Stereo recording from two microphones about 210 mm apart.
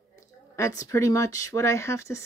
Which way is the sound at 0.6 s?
15° left (ahead or behind).